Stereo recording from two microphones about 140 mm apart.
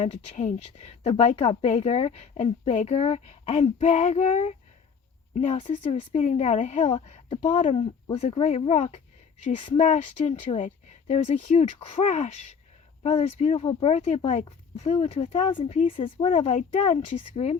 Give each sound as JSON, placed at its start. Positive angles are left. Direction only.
{"t": 0.0, "sound": "a woman's voice", "side_deg": 55}
{"t": 9.6, "sound": "speech", "side_deg": 40}
{"t": 9.8, "sound": "a woman's voice", "side_deg": 55}
{"t": 16.6, "sound": "speech", "side_deg": 60}
{"t": 17.3, "sound": "a woman's voice", "side_deg": 45}